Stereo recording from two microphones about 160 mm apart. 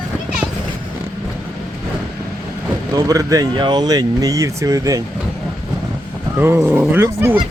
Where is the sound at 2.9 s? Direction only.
20° right (ahead or behind).